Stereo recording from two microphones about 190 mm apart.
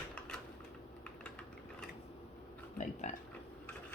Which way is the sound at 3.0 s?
35° left (ahead or behind).